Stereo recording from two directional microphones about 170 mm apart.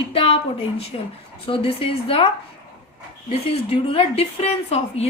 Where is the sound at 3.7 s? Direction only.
35° left (ahead or behind).